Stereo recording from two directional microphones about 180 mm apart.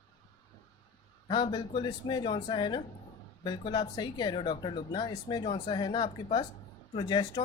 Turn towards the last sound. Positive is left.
turn(degrees=25)  # may be behind; listen again after turning